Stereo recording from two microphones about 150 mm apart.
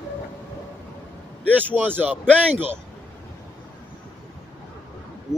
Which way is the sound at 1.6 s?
10° right (ahead or behind).